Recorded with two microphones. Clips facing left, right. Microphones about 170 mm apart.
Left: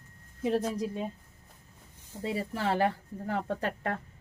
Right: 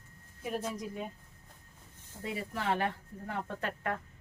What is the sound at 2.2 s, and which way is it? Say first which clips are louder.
Speech: left 4 dB; 30° left (ahead or behind).